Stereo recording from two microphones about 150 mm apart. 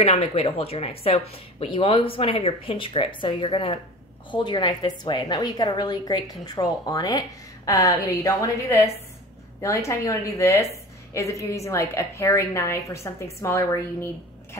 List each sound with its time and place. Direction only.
0.0 s a woman's voice: 40° left (ahead or behind); by 13.7 s 20° left (ahead or behind)